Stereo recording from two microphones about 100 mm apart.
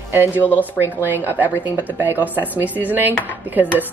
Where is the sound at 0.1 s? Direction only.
20° right (ahead or behind).